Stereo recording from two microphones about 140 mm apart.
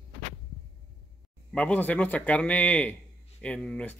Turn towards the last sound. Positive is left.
turn(degrees=10)  # may be behind; listen again after turning